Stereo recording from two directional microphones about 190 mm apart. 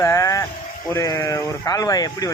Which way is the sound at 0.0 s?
15° left (ahead or behind).